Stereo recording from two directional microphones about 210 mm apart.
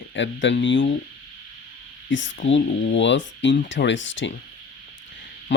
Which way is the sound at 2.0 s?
60° left (ahead or behind).